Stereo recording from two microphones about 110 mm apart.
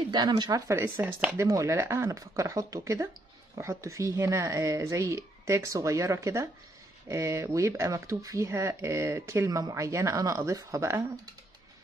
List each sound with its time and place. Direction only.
0.1 s speech: 40° right (ahead or behind); by 1.3 s 15° right (ahead or behind)
1.3 s speech: 30° right (ahead or behind)